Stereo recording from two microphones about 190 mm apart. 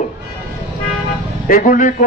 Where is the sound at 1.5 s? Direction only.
45° left (ahead or behind).